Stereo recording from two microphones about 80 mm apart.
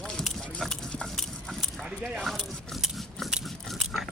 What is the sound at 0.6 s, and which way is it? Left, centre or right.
Stir, centre.